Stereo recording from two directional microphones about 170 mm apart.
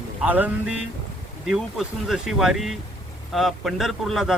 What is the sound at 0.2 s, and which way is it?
Speech, 10° right (ahead or behind).